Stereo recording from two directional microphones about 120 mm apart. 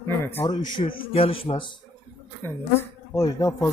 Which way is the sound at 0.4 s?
40° left (ahead or behind).